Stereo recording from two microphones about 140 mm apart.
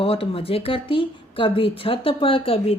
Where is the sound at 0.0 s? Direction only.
40° left (ahead or behind).